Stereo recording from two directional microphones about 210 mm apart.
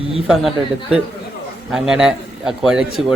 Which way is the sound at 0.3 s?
Centre (ahead or behind).